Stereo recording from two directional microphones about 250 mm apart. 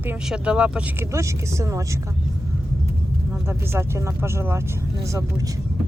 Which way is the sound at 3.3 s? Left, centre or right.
Centre.